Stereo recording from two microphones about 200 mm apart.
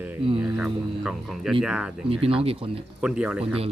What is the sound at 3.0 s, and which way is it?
Speech, 5° right (ahead or behind).